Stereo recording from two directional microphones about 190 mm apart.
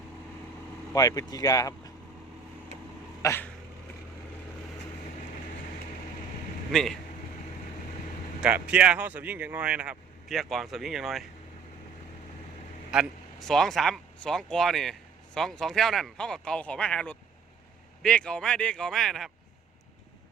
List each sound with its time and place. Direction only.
0.9 s speech: 20° left (ahead or behind)
3.2 s a sound: 15° left (ahead or behind)
6.7 s speech: centre (ahead or behind)
8.4 s speech: 5° right (ahead or behind)
12.9 s speech: centre (ahead or behind)